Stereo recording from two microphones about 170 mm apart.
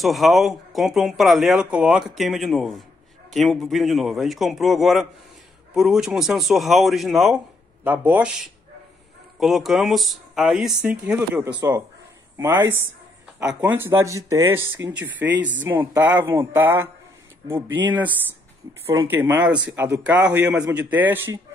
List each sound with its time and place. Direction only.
0.0 s speech: centre (ahead or behind)
15.2 s speech: 90° right
15.6 s speech: 10° right (ahead or behind)
19.0 s speech: 10° right (ahead or behind)